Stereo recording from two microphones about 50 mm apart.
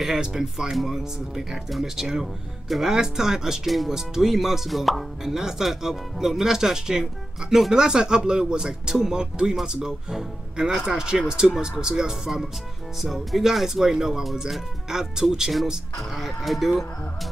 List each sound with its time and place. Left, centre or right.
0.0 s speech: centre